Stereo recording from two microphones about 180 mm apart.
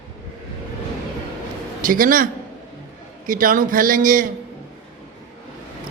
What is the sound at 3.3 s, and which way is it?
A man's voice, 50° right (ahead or behind).